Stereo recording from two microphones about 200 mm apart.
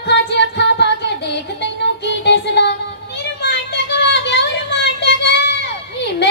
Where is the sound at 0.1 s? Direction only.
60° left (ahead or behind).